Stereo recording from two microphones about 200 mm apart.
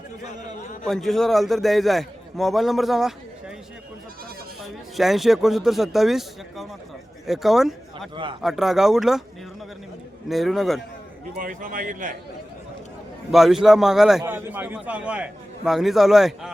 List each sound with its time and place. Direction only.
0.9 s a man's voice: centre (ahead or behind)
4.6 s a man's voice: centre (ahead or behind)
8.1 s a man's voice: 25° right (ahead or behind)
8.4 s a man's voice: centre (ahead or behind)
10.2 s a man's voice: centre (ahead or behind)
11.3 s a man's voice: 45° right (ahead or behind)
13.3 s a man's voice: centre (ahead or behind)